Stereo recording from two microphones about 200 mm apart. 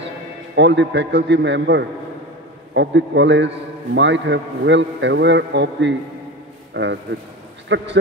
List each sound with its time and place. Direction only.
0.6 s a man's voice: 60° right (ahead or behind)